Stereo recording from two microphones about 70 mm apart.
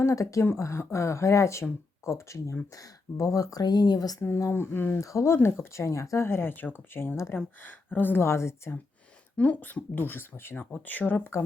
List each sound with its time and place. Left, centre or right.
0.0 s speech: left
2.7 s speech: left
4.2 s speech: left
4.9 s speech: left
8.2 s speech: left
9.4 s speech: left